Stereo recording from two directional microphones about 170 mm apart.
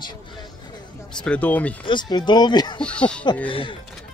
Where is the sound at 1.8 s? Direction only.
25° left (ahead or behind).